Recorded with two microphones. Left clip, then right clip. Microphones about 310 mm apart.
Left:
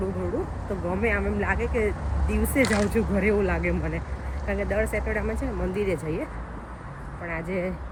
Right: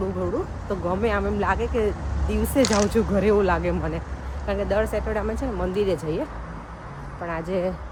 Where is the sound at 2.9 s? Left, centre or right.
Centre.